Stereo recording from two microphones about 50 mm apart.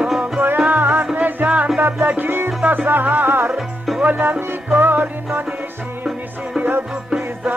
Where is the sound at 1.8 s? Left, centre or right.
Right.